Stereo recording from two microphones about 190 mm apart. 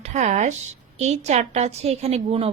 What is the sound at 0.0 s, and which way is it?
A woman's voice, 35° right (ahead or behind).